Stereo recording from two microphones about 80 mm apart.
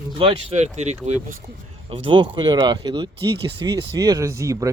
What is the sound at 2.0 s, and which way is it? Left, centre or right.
Speech, right.